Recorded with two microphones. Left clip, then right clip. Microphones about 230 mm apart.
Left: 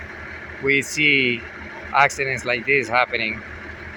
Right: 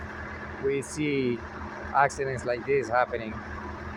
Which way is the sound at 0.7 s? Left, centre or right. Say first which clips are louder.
Left 11 dB; centre.